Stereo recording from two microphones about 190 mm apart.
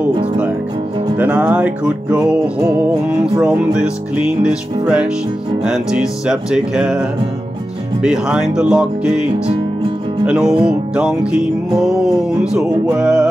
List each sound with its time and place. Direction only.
0.1 s speech: 25° right (ahead or behind)
1.1 s speech: 5° right (ahead or behind)
3.1 s music: 5° right (ahead or behind)